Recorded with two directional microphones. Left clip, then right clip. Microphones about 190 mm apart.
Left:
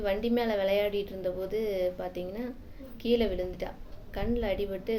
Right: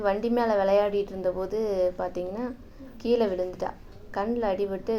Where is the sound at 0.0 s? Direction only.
5° right (ahead or behind).